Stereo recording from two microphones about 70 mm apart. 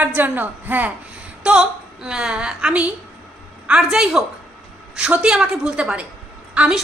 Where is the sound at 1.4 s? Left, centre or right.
Centre.